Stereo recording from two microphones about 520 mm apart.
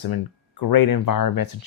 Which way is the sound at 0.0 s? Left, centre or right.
Left.